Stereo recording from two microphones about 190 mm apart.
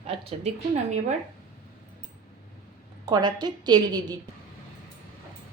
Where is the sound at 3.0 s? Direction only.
20° right (ahead or behind).